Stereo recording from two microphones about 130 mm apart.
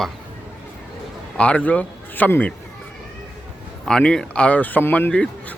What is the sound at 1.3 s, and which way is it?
A man's voice, 10° left (ahead or behind).